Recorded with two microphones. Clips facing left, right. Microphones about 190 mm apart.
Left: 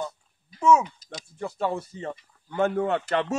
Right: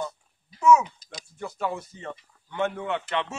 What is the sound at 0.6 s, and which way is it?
A man's voice, 30° left (ahead or behind).